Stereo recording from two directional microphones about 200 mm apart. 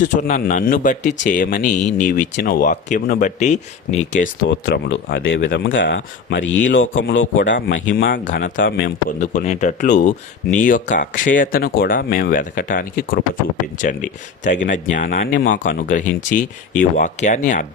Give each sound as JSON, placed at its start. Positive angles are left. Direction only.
{"t": 0.1, "sound": "speech", "side_deg": 40}
{"t": 4.4, "sound": "speech", "side_deg": 70}
{"t": 8.0, "sound": "speech", "side_deg": 40}